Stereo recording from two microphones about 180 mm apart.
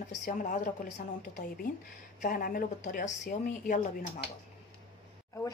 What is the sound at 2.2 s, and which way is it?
Speech, 55° left (ahead or behind).